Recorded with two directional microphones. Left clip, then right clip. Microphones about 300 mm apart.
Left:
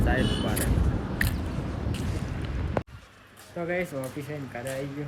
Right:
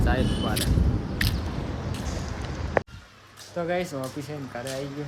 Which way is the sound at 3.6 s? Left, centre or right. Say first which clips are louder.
Right 3 dB; centre.